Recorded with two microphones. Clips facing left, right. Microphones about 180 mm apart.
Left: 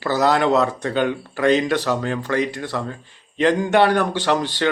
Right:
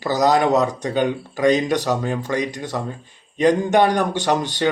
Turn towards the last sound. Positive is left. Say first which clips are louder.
# even
turn(degrees=-15)  # may be behind; listen again after turning